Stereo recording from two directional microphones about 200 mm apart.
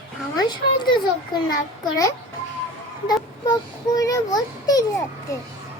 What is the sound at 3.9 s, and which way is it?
A child's voice, 15° left (ahead or behind).